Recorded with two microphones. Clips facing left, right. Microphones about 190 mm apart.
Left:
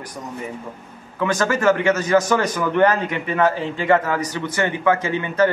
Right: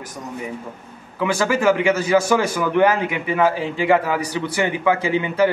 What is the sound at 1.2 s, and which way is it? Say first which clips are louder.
A man's voice: even; 10° right (ahead or behind).